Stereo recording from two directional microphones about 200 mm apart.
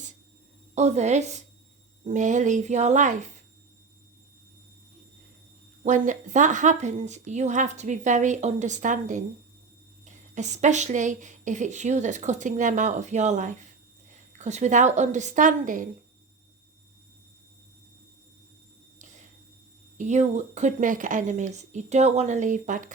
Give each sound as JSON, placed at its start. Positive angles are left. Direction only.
{"t": 0.8, "sound": "a woman's voice", "side_deg": -35}
{"t": 5.8, "sound": "a woman's voice", "side_deg": -35}
{"t": 20.0, "sound": "a woman's voice", "side_deg": -35}